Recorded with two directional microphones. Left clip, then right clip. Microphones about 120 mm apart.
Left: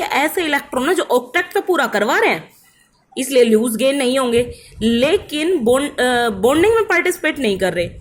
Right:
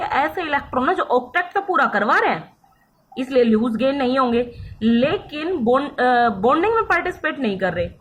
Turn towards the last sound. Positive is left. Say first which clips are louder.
# left 3 dB
turn(degrees=45)  # may be behind; listen again after turning